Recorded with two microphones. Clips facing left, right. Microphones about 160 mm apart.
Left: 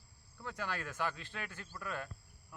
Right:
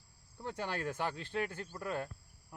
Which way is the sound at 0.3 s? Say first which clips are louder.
Right 3 dB; 30° right (ahead or behind).